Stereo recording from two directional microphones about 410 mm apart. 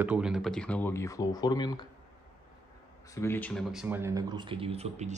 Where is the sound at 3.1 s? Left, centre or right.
Centre.